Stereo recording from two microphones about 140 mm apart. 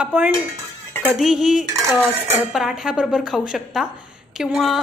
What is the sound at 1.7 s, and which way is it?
Speech, 20° right (ahead or behind).